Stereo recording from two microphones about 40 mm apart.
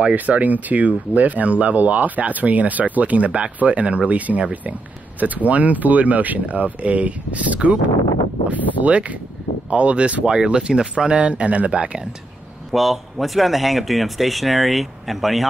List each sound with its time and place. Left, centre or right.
0.1 s speech: right
10.2 s speech: centre
12.7 s speech: centre